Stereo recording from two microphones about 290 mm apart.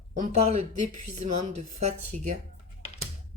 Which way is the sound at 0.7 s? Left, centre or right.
Right.